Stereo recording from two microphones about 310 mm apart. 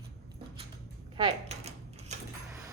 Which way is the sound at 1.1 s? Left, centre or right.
Centre.